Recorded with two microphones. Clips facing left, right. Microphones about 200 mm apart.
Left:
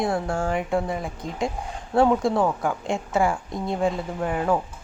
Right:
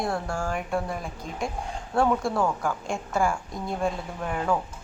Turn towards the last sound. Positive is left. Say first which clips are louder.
# left 5 dB
turn(degrees=10)  # may be behind; listen again after turning